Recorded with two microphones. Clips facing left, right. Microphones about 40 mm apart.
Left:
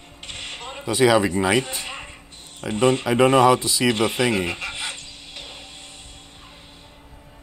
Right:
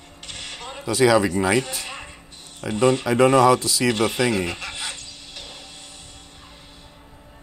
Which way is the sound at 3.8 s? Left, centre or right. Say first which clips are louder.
Left 1 dB; left.